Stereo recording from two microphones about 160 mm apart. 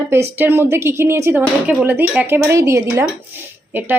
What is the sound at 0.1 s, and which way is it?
Speech, 15° right (ahead or behind).